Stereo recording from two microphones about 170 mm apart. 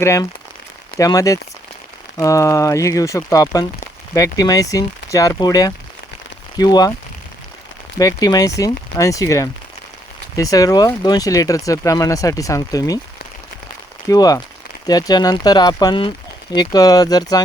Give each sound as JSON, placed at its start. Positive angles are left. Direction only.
{"t": 0.0, "sound": "speech", "side_deg": 15}
{"t": 7.9, "sound": "speech", "side_deg": 20}
{"t": 14.1, "sound": "speech", "side_deg": 20}